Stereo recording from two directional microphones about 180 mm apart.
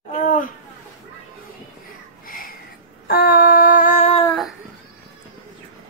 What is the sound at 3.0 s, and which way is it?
Female singing, 55° left (ahead or behind).